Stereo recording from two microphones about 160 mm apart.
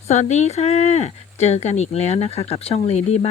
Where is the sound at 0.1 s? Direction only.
45° left (ahead or behind).